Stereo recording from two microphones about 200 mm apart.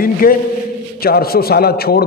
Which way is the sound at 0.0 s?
45° left (ahead or behind).